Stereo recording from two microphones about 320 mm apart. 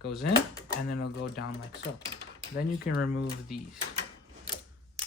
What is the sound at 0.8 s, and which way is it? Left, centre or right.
Speech, left.